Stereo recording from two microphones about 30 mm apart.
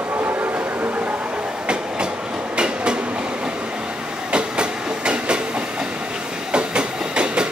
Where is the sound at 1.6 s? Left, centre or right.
Right.